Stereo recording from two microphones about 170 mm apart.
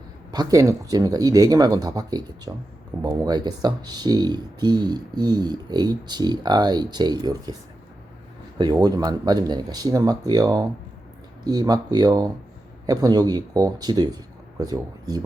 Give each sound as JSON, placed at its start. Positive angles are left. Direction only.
{"t": 0.3, "sound": "speech", "side_deg": -20}
{"t": 8.5, "sound": "speech", "side_deg": -25}